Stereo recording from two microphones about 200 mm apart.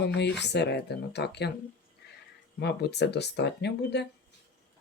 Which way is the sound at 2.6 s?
55° left (ahead or behind).